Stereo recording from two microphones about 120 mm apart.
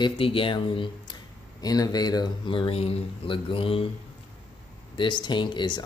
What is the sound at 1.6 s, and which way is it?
Speech, 35° left (ahead or behind).